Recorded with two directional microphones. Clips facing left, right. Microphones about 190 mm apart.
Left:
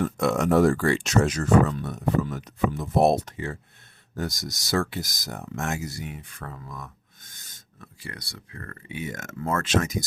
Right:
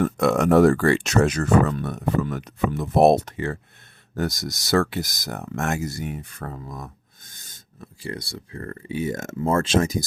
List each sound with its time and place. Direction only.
0.0 s speech: 65° right (ahead or behind); by 10.0 s 30° right (ahead or behind)